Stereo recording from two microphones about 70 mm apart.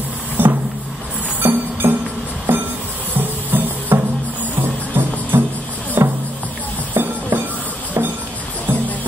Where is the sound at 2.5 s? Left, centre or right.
Right.